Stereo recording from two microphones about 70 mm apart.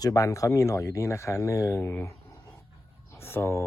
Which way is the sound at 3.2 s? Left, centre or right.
Left.